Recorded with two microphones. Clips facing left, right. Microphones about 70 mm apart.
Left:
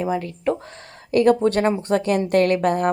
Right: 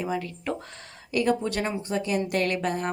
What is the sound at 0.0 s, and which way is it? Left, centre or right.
Speech, left.